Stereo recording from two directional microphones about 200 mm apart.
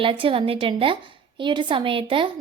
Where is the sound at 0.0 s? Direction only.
25° right (ahead or behind).